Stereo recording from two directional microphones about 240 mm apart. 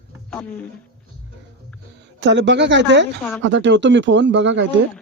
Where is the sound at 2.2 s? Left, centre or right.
Right.